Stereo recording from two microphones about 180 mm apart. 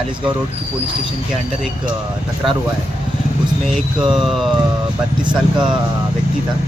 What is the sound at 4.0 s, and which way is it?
Speech, 5° right (ahead or behind).